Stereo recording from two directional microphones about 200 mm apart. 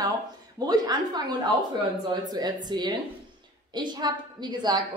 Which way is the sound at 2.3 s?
20° right (ahead or behind).